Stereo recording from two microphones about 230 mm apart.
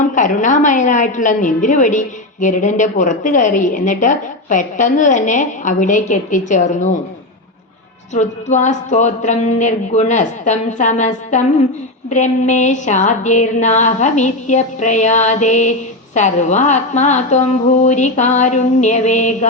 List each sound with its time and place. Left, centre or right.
0.1 s a woman's voice: left
8.1 s a woman's voice: left